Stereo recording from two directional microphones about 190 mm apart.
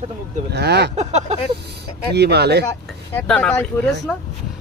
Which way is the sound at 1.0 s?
35° right (ahead or behind).